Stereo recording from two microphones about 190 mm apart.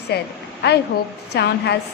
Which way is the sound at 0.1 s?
60° left (ahead or behind).